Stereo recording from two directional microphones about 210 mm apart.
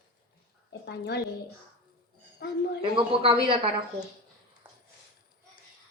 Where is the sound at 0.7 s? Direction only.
55° left (ahead or behind).